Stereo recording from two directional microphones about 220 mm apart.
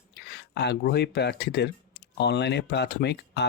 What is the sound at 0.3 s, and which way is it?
Speech, 50° left (ahead or behind).